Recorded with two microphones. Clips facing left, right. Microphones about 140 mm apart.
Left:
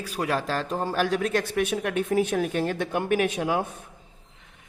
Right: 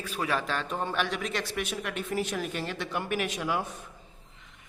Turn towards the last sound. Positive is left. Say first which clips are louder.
# left 6 dB
turn(degrees=50)  # may be behind; listen again after turning